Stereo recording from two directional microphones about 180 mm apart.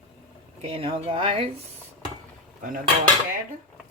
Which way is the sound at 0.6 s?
30° right (ahead or behind).